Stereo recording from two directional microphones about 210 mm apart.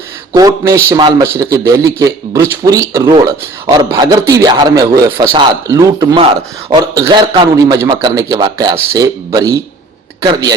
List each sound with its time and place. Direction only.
0.3 s a man's voice: 15° right (ahead or behind)